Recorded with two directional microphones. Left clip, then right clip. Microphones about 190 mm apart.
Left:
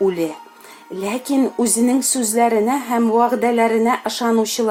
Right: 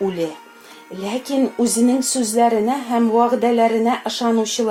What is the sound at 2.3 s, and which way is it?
A woman's voice, 40° left (ahead or behind).